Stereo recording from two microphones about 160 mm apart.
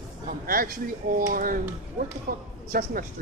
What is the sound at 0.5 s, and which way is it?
Speech, 65° right (ahead or behind).